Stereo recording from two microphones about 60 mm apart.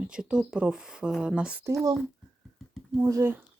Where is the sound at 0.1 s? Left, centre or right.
Centre.